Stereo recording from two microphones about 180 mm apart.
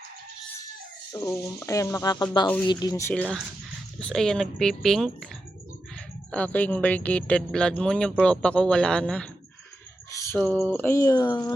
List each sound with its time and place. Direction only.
1.1 s speech: 15° left (ahead or behind); by 5.3 s centre (ahead or behind)
6.3 s speech: 10° left (ahead or behind)
10.1 s a sound: 15° left (ahead or behind)
10.5 s speech: 10° right (ahead or behind)
10.8 s speech: 15° left (ahead or behind)